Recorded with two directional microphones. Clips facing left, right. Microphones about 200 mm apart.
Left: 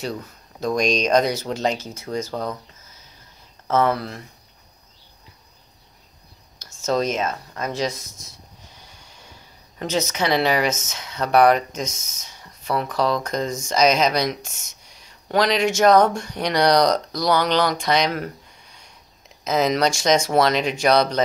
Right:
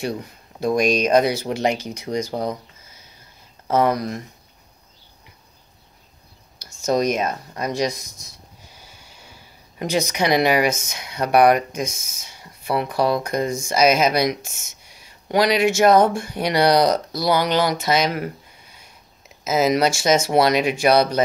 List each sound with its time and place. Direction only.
0.0 s speech: 10° right (ahead or behind)
3.6 s speech: 15° right (ahead or behind)
6.6 s speech: 10° right (ahead or behind)
9.8 s speech: 15° right (ahead or behind)